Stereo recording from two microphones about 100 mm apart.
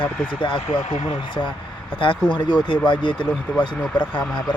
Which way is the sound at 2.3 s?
50° left (ahead or behind).